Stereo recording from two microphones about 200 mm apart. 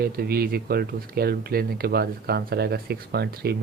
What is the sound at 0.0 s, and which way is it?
Speech, 50° right (ahead or behind).